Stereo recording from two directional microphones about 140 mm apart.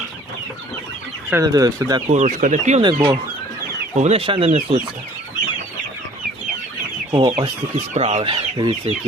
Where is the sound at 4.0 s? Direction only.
45° right (ahead or behind).